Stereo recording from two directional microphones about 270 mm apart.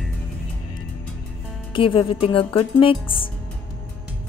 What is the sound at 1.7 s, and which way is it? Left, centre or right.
Speech, centre.